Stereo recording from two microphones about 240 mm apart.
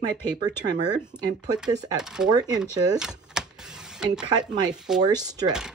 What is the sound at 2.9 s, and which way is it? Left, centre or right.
Typewriter, centre.